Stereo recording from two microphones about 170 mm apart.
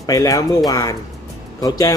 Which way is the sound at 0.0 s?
20° left (ahead or behind).